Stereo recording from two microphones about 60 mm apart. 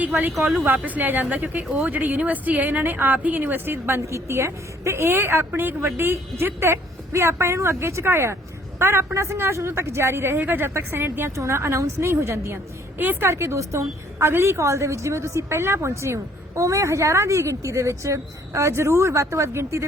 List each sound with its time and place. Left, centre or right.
0.9 s speech: right
3.7 s a woman's voice: right
10.3 s speech: right
11.3 s a woman's voice: right
13.0 s a woman's voice: right
14.2 s a woman's voice: right